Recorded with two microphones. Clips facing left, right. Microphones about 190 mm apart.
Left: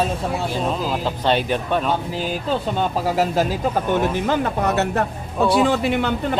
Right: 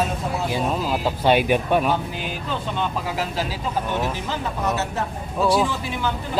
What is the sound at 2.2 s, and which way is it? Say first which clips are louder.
Speech: left 6 dB; 35° left (ahead or behind).